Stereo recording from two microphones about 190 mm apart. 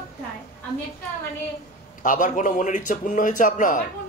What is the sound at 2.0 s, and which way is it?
A man's voice, 45° left (ahead or behind).